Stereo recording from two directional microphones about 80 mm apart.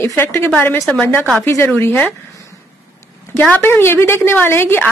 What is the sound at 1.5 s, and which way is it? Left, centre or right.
Speech, left.